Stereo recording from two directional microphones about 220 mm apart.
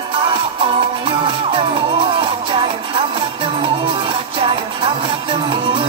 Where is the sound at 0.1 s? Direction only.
25° right (ahead or behind).